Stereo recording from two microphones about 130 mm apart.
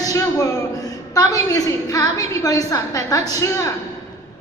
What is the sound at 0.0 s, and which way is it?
A woman's voice, 25° left (ahead or behind).